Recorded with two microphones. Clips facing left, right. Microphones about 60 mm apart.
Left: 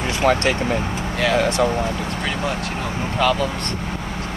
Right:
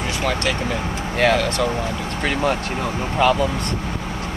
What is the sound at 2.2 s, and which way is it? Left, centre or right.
Speech, right.